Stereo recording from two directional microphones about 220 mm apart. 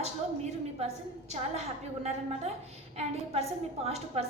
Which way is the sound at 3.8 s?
30° right (ahead or behind).